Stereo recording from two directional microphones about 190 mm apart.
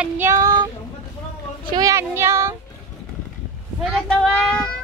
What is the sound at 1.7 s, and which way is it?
Child singing, 20° right (ahead or behind).